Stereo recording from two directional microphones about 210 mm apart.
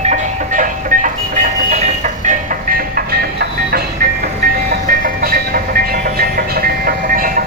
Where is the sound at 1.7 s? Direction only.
35° right (ahead or behind).